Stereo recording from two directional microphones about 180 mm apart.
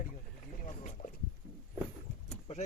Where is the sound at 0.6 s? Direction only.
45° left (ahead or behind).